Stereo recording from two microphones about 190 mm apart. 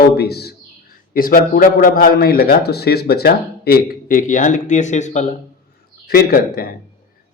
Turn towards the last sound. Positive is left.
turn(degrees=50)  # may be behind; listen again after turning